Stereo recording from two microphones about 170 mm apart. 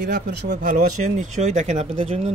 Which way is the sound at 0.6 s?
50° right (ahead or behind).